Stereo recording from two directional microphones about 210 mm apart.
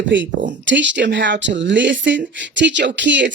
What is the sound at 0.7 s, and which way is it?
A woman's voice, 60° right (ahead or behind).